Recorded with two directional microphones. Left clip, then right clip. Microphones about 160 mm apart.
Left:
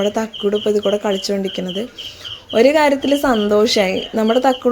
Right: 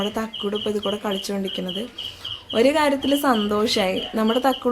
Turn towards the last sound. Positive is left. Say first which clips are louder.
# left 6 dB
turn(degrees=30)  # may be behind; listen again after turning